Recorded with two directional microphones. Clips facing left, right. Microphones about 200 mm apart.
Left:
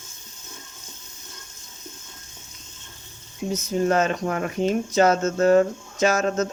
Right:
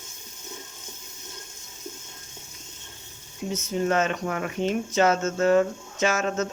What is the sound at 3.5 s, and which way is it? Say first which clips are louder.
Speech: left 3 dB; 35° left (ahead or behind).